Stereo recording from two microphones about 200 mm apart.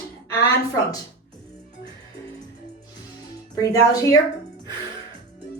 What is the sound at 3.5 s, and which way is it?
Speech, 15° left (ahead or behind).